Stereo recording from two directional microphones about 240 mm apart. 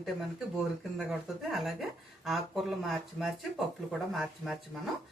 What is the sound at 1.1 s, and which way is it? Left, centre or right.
Speech, centre.